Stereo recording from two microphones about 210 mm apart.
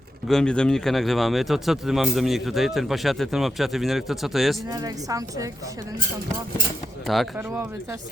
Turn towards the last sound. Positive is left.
turn(degrees=-10)  # may be behind; listen again after turning